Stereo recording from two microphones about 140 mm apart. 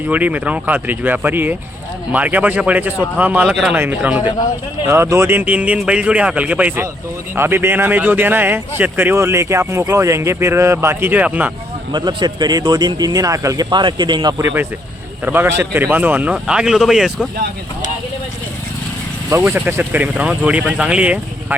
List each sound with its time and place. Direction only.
0.1 s a man's voice: 10° right (ahead or behind)
3.8 s a man's voice: 10° right (ahead or behind)
11.9 s a man's voice: 30° right (ahead or behind); by 17.2 s centre (ahead or behind)
19.3 s a man's voice: 20° right (ahead or behind)